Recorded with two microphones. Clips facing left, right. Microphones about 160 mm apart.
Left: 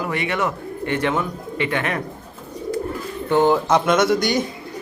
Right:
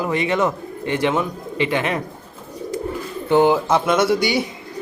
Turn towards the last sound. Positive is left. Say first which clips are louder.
# even
turn(degrees=-5)  # may be behind; listen again after turning